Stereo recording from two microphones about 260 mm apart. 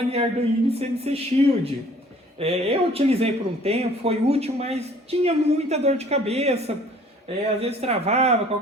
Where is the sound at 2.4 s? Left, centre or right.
Right.